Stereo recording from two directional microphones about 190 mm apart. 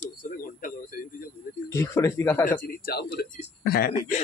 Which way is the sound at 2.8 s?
55° left (ahead or behind).